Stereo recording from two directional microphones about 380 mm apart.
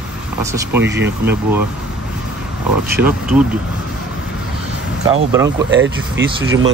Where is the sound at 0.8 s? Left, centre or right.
Right.